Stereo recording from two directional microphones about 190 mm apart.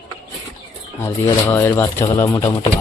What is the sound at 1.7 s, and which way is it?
Speech, 20° left (ahead or behind).